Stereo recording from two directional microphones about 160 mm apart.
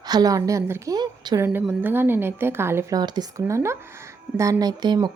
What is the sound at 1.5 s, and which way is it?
A woman's voice, 10° right (ahead or behind).